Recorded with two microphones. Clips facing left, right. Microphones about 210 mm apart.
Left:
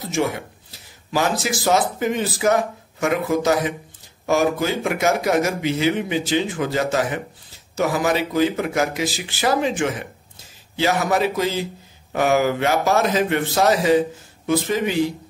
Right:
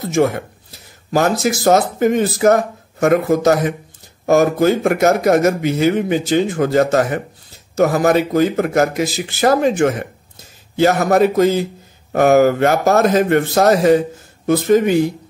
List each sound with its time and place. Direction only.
0.1 s speech: 50° right (ahead or behind)